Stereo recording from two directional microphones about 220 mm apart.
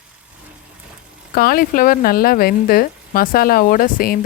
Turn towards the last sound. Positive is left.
turn(degrees=40)  # may be behind; listen again after turning